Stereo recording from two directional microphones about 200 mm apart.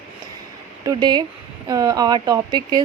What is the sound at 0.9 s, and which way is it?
Speech, 20° right (ahead or behind).